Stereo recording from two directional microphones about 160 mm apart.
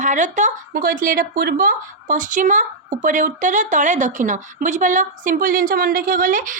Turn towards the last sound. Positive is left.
turn(degrees=-55)  # may be behind; listen again after turning